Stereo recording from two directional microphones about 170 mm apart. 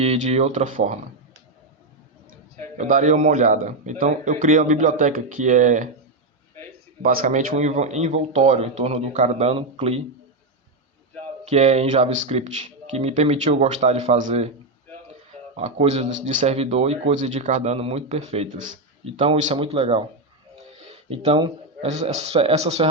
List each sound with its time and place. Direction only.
0.0 s a man's voice: 40° right (ahead or behind)
2.7 s a man's voice: 50° right (ahead or behind)
7.0 s speech: 55° right (ahead or behind); by 10.0 s 35° right (ahead or behind)
11.4 s speech: 40° right (ahead or behind)
15.5 s speech: 40° right (ahead or behind)
20.7 s a sound: 35° right (ahead or behind)
21.3 s a man's voice: 25° right (ahead or behind)
21.8 s speech: 40° right (ahead or behind)